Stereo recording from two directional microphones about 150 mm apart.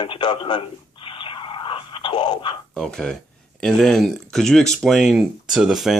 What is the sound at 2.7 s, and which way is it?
Speech, 5° left (ahead or behind).